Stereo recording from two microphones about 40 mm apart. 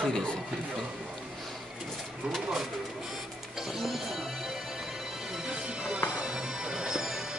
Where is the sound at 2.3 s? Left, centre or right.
Centre.